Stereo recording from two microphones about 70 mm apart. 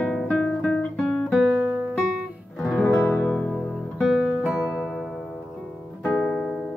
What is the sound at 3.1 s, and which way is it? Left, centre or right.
Music, centre.